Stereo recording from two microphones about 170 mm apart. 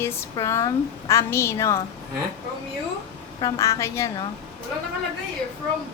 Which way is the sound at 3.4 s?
20° left (ahead or behind).